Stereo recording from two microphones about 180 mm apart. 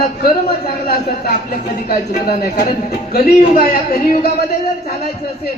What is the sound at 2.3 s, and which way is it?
Speech, 60° left (ahead or behind).